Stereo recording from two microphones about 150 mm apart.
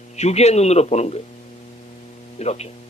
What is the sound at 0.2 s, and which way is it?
A man's voice, 45° left (ahead or behind).